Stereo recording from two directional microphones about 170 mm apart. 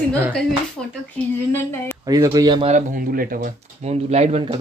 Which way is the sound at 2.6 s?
50° right (ahead or behind).